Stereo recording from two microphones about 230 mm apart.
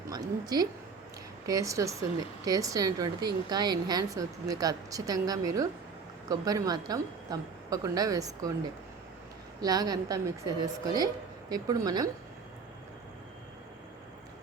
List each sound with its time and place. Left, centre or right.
0.1 s a woman's voice: centre
9.6 s speech: centre